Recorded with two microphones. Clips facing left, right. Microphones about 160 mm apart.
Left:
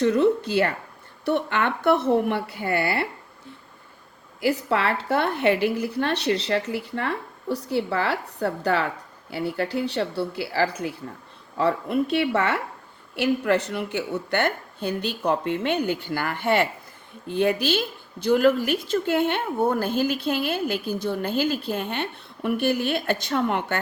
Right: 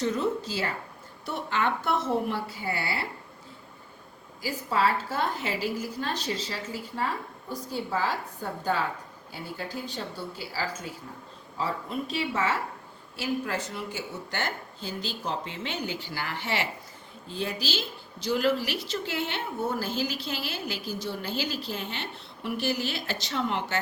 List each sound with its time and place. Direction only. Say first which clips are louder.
0.0 s a woman's voice: left 8 dB; 65° left (ahead or behind)
4.4 s a woman's voice: left 5 dB; 70° left (ahead or behind)